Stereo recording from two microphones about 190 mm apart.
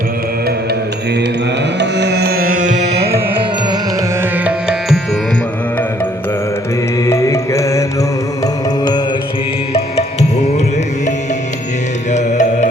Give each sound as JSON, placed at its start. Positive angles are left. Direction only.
{"t": 1.8, "sound": "music", "side_deg": -60}
{"t": 4.2, "sound": "music", "side_deg": -5}
{"t": 7.0, "sound": "music", "side_deg": 15}
{"t": 12.1, "sound": "music", "side_deg": 40}